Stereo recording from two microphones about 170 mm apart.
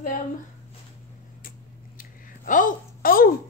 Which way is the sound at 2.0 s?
50° left (ahead or behind).